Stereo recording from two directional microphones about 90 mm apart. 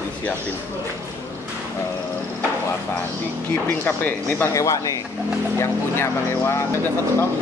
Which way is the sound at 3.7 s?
25° left (ahead or behind).